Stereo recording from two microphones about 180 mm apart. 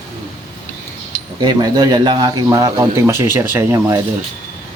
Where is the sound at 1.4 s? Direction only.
25° right (ahead or behind).